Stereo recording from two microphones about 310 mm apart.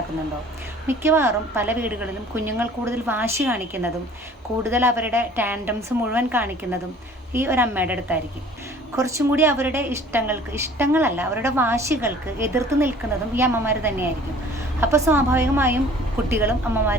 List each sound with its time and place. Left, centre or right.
0.9 s a woman's voice: centre